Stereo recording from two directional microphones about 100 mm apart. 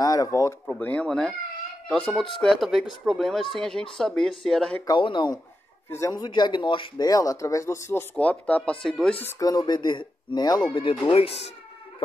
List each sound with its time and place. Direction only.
0.0 s speech: 40° left (ahead or behind)
0.7 s speech: 15° left (ahead or behind)
4.8 s speech: 50° left (ahead or behind)
5.9 s speech: 30° left (ahead or behind)
6.1 s speech: 45° left (ahead or behind)
7.1 s speech: 35° left (ahead or behind)
8.2 s speech: 15° left (ahead or behind)
9.4 s speech: 40° left (ahead or behind)
10.7 s speech: 60° left (ahead or behind); by 11.4 s 85° left